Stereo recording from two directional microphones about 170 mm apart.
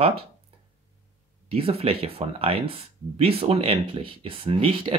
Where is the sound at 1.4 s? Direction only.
35° right (ahead or behind).